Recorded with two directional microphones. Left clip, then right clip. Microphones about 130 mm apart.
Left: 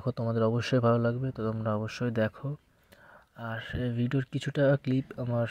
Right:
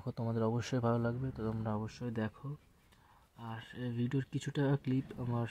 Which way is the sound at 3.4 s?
45° left (ahead or behind).